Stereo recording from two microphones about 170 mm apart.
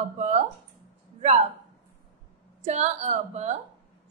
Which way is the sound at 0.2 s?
45° right (ahead or behind).